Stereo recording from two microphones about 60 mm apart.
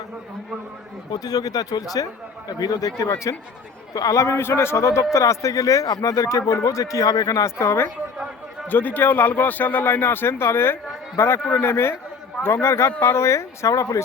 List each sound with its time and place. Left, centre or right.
1.2 s speech: left
3.9 s speech: left
4.4 s speech: left
7.4 s speech: left
8.6 s speech: left